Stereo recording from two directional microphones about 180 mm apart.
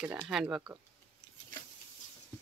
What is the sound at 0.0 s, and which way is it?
Speech, 10° right (ahead or behind).